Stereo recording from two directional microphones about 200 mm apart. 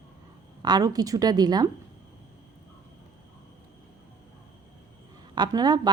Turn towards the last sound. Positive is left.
turn(degrees=-20)  # may be behind; listen again after turning